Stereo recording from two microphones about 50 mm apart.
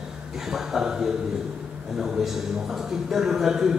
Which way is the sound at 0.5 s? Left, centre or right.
Centre.